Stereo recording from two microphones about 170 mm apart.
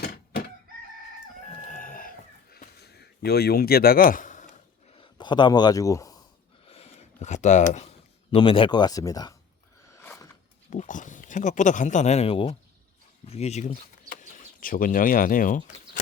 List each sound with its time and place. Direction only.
1.5 s chicken: 45° left (ahead or behind)
4.9 s a sound: 25° left (ahead or behind)
6.7 s speech: 35° left (ahead or behind); by 9.3 s 20° left (ahead or behind)
10.7 s speech: 45° left (ahead or behind)
14.1 s speech: 45° left (ahead or behind)